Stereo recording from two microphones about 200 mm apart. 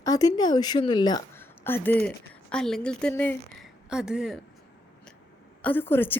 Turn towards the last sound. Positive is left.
turn(degrees=10)  # may be behind; listen again after turning